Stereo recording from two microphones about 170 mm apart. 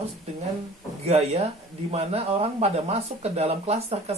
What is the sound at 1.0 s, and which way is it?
Speech, 40° right (ahead or behind).